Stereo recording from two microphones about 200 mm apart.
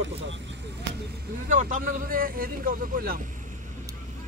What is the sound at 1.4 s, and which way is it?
Speech, 40° right (ahead or behind).